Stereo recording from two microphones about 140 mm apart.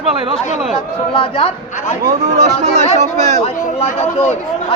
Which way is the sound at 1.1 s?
40° left (ahead or behind).